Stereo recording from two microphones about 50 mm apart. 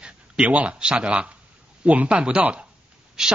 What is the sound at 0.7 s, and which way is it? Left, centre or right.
Speech, centre.